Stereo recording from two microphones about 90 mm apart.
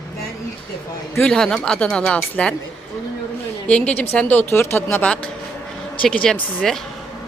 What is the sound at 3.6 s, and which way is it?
A woman's voice, 15° left (ahead or behind).